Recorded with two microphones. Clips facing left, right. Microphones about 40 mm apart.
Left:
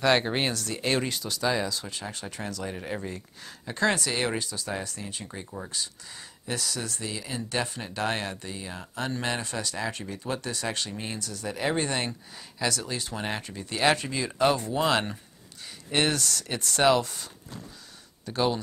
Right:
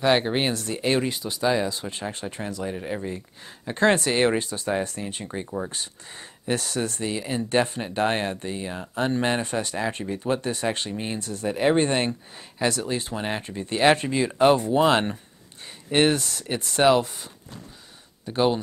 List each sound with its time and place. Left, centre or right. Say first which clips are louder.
0.0 s speech: right 3 dB; centre
1.7 s speech: right 4 dB; right
2.6 s speech: right 5 dB; centre
3.4 s speech: right 5 dB; right
5.2 s speech: right 8 dB; right
5.7 s speech: right 1 dB; right
11.1 s speech: right 6 dB; right
13.1 s speech: right 3 dB; centre
13.4 s speech: right 6 dB; right